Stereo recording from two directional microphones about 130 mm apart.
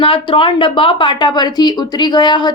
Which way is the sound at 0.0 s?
45° left (ahead or behind).